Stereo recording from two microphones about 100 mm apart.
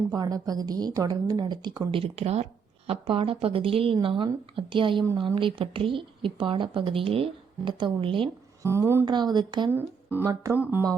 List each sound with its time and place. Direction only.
0.1 s a woman's voice: 40° right (ahead or behind)
1.9 s speech: 75° right (ahead or behind)
2.8 s a woman's voice: 70° right (ahead or behind)
8.6 s speech: 25° right (ahead or behind)
9.0 s a woman's voice: 45° right (ahead or behind)
9.6 s speech: 20° right (ahead or behind)